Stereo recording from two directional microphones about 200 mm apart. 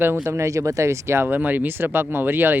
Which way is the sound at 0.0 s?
10° right (ahead or behind).